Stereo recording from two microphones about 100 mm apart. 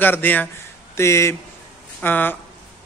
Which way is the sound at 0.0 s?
20° left (ahead or behind).